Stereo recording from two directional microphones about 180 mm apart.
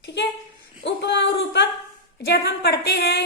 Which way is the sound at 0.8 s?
75° left (ahead or behind).